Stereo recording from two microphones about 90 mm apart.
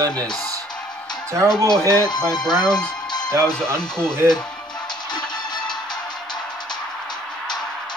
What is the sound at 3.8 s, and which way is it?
Speech, 10° left (ahead or behind).